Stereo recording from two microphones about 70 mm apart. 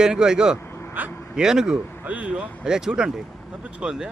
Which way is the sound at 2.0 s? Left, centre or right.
Centre.